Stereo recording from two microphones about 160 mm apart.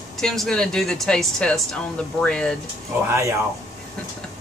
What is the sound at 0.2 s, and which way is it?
Speech, 5° left (ahead or behind).